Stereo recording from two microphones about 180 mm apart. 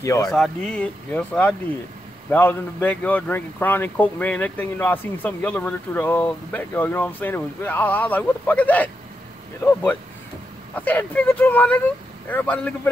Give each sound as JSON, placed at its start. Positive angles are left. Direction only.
{"t": 0.0, "sound": "speech", "side_deg": 15}
{"t": 0.3, "sound": "speech", "side_deg": 5}